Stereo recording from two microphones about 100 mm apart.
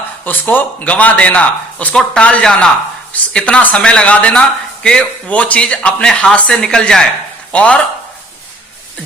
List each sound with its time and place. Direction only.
0.3 s speech: 20° left (ahead or behind)